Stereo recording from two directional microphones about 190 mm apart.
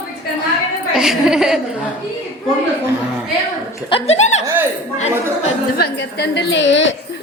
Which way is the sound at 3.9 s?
35° left (ahead or behind).